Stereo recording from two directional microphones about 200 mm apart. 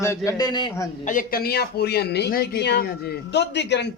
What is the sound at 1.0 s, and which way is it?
A man's voice, 45° left (ahead or behind).